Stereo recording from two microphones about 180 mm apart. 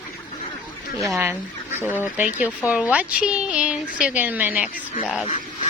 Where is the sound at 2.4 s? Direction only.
5° right (ahead or behind).